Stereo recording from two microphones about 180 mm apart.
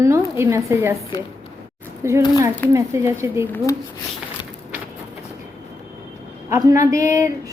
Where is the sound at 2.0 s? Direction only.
15° right (ahead or behind).